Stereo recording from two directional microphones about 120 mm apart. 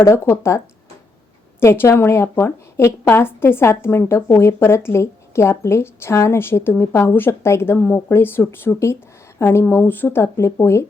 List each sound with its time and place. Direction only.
0.0 s a woman's voice: 25° left (ahead or behind)
1.6 s a woman's voice: 20° left (ahead or behind)